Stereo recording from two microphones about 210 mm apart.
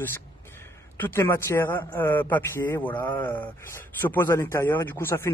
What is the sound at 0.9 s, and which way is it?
Speech, 10° left (ahead or behind).